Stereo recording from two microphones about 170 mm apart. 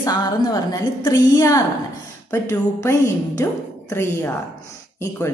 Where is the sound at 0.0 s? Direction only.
20° left (ahead or behind).